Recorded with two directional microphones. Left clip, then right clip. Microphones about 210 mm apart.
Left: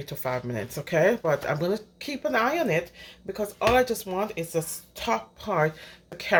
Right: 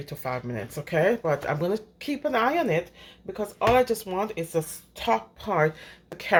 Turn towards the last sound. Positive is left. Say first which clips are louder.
# right 1 dB
turn(degrees=-15)  # may be behind; listen again after turning